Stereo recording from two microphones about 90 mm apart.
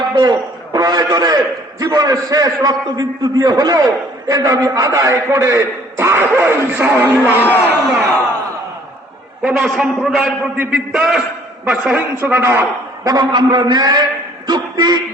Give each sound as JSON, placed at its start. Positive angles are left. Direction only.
{"t": 0.1, "sound": "a man's voice", "side_deg": -50}
{"t": 7.4, "sound": "a man's voice", "side_deg": 20}
{"t": 9.4, "sound": "a man's voice", "side_deg": -15}
{"t": 13.1, "sound": "a man's voice", "side_deg": -50}